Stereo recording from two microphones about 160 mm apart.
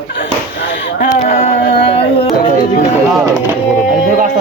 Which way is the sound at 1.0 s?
55° left (ahead or behind).